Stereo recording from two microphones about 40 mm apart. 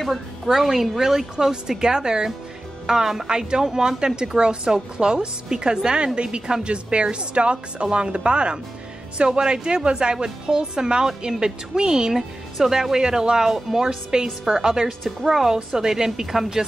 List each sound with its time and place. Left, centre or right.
0.1 s a woman's voice: centre
14.9 s a woman's voice: centre